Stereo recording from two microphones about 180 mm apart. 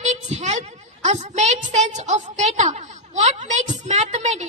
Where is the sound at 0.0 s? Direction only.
40° right (ahead or behind).